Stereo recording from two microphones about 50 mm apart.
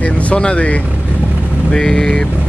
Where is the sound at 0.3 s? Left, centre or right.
Left.